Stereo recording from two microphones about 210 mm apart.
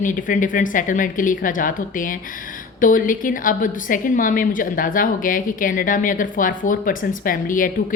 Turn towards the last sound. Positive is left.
turn(degrees=40)  # may be behind; listen again after turning